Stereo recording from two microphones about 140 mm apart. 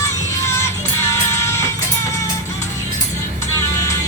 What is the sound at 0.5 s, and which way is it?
Music, 20° left (ahead or behind).